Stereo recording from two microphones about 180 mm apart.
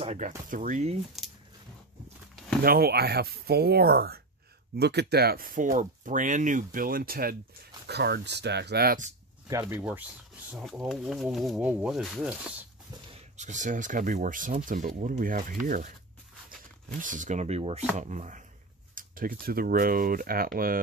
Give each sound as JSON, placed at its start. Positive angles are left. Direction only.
{"t": 0.0, "sound": "speech", "side_deg": -35}
{"t": 1.2, "sound": "a sound", "side_deg": 0}
{"t": 2.6, "sound": "speech", "side_deg": -55}
{"t": 7.9, "sound": "speech", "side_deg": -65}
{"t": 9.5, "sound": "speech", "side_deg": -15}
{"t": 10.5, "sound": "speech", "side_deg": 0}
{"t": 13.1, "sound": "speech", "side_deg": -40}
{"t": 17.0, "sound": "speech", "side_deg": -45}